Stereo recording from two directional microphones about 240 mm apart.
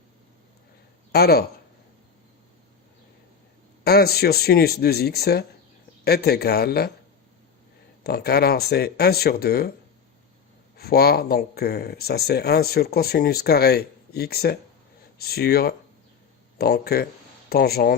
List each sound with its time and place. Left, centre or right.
1.1 s speech: left
3.8 s speech: left
8.0 s speech: left
10.8 s speech: left